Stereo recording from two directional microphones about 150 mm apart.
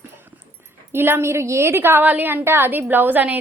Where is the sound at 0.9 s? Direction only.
15° right (ahead or behind).